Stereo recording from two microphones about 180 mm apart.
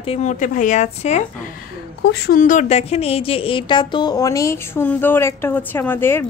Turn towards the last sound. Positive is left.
turn(degrees=10)  # may be behind; listen again after turning